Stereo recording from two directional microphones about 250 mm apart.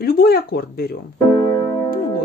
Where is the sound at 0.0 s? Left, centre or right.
Left.